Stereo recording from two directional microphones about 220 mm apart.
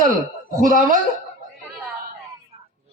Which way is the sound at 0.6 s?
40° right (ahead or behind).